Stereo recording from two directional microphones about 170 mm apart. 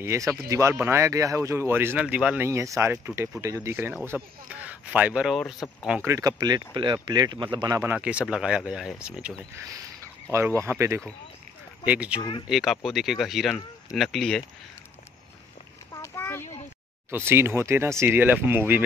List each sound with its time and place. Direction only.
0.0 s speech: 15° right (ahead or behind)
5.6 s speech: 5° left (ahead or behind)
6.0 s speech: 20° right (ahead or behind)
12.2 s speech: 25° left (ahead or behind)
12.4 s speech: centre (ahead or behind)
15.9 s a sound: 15° left (ahead or behind)
17.1 s speech: 15° right (ahead or behind)